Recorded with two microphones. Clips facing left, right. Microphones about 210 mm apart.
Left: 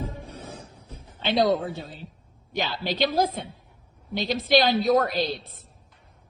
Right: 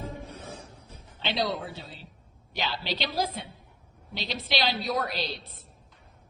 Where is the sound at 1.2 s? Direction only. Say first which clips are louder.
Left 8 dB; 50° left (ahead or behind).